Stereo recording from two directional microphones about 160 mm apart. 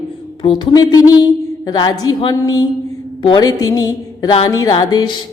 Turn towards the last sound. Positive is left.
turn(degrees=25)  # may be behind; listen again after turning